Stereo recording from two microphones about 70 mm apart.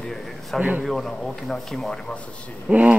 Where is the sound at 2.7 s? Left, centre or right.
Centre.